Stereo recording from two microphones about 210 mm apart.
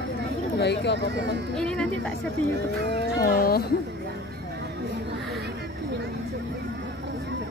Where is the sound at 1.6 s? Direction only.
5° left (ahead or behind).